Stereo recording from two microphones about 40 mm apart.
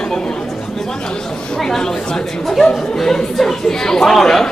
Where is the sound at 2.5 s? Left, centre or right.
Centre.